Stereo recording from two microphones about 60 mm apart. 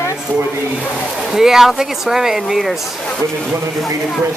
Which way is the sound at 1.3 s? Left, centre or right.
Centre.